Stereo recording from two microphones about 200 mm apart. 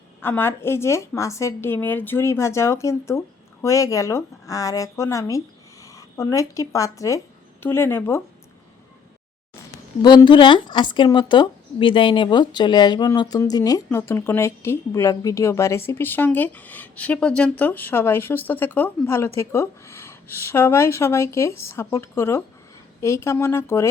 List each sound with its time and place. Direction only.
0.2 s speech: 10° left (ahead or behind)
10.0 s speech: 20° left (ahead or behind)